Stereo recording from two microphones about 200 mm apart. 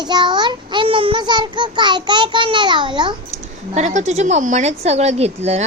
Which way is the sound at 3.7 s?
35° right (ahead or behind).